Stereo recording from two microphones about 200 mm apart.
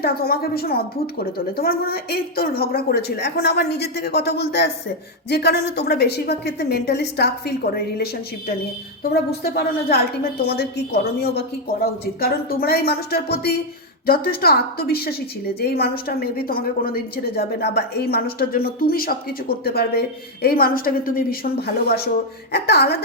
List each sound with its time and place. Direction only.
0.0 s a woman's voice: 50° left (ahead or behind)